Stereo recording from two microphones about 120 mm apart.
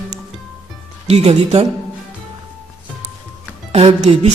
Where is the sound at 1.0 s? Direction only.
60° right (ahead or behind).